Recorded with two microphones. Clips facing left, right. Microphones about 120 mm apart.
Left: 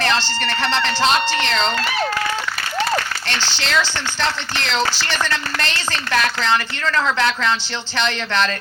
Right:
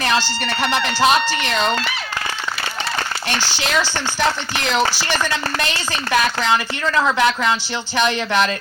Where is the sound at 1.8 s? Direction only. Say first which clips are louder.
Left 5 dB; 45° left (ahead or behind).